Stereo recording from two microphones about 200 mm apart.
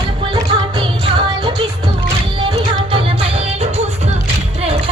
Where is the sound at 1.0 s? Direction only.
25° right (ahead or behind).